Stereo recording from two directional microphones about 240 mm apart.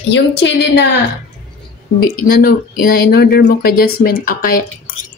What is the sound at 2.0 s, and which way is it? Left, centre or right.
Speech, left.